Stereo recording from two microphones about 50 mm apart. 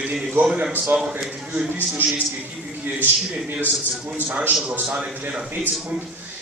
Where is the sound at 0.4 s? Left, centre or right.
Right.